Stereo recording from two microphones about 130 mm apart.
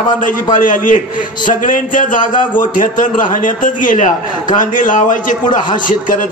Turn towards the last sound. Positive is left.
turn(degrees=85)